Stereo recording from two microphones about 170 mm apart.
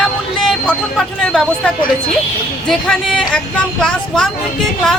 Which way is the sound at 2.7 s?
5° left (ahead or behind).